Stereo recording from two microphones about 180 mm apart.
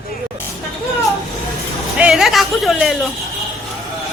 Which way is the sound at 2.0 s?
5° right (ahead or behind).